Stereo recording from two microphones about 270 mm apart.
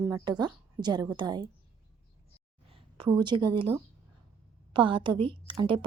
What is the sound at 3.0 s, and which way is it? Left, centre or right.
A woman's voice, centre.